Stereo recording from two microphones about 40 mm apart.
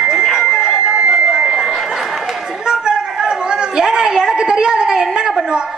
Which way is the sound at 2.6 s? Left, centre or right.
Centre.